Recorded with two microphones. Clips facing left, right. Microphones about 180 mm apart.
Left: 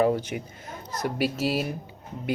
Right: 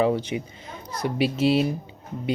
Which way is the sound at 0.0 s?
5° left (ahead or behind).